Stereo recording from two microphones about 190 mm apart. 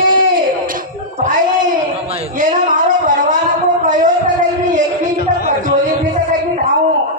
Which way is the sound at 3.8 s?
45° right (ahead or behind).